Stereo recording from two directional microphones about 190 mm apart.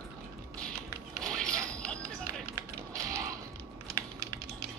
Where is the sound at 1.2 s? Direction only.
5° left (ahead or behind).